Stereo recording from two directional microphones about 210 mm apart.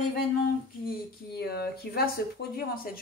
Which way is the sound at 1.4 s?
50° left (ahead or behind).